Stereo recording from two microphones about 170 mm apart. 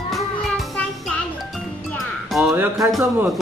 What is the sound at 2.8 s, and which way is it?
Speech, centre (ahead or behind).